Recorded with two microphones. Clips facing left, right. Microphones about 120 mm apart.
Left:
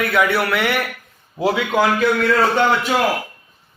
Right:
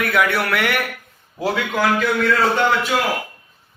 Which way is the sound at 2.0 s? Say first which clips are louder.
Left 2 dB; 25° left (ahead or behind).